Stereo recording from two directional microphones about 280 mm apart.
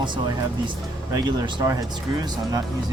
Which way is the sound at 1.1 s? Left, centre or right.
Centre.